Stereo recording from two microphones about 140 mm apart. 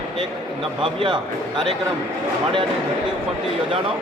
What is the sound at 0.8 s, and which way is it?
Speech, 35° right (ahead or behind).